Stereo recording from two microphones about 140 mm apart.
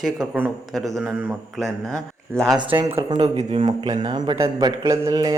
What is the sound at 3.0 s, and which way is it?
A man's voice, 30° right (ahead or behind).